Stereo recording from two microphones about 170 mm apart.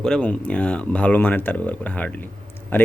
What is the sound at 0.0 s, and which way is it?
Speech, 5° left (ahead or behind).